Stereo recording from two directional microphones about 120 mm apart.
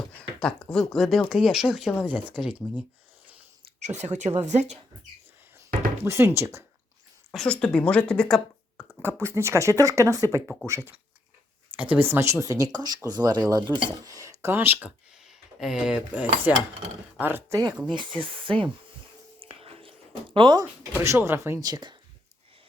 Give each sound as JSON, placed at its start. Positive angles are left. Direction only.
{"t": 0.2, "sound": "speech", "side_deg": 5}
{"t": 3.8, "sound": "speech", "side_deg": -70}
{"t": 6.1, "sound": "speech", "side_deg": -20}
{"t": 7.3, "sound": "speech", "side_deg": 10}
{"t": 9.0, "sound": "speech", "side_deg": -20}
{"t": 10.4, "sound": "speech", "side_deg": 0}
{"t": 10.7, "sound": "speech", "side_deg": -25}
{"t": 15.3, "sound": "speech", "side_deg": -5}
{"t": 17.9, "sound": "speech", "side_deg": -45}
{"t": 19.4, "sound": "whispering", "side_deg": -50}
{"t": 20.3, "sound": "speech", "side_deg": -40}
{"t": 21.0, "sound": "speech", "side_deg": -20}
{"t": 21.6, "sound": "speech", "side_deg": -35}